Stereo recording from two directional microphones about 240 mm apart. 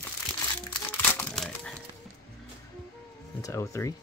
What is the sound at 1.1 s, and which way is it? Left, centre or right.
Crumpling, centre.